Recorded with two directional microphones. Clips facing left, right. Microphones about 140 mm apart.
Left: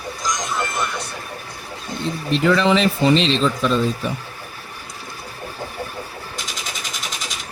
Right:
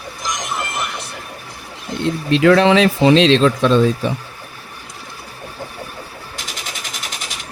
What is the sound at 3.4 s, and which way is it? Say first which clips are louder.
Speech: right 5 dB; 70° right (ahead or behind).